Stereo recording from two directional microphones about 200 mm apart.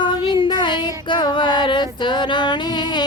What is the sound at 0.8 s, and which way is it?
Female singing, 20° left (ahead or behind).